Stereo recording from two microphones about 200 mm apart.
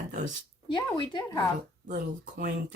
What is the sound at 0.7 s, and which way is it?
Speech, 25° left (ahead or behind).